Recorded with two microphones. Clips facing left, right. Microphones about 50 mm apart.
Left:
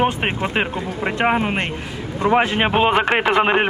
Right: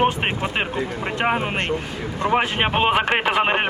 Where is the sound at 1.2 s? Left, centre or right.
Centre.